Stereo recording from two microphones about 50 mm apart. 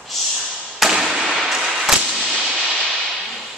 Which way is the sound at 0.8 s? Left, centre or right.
Centre.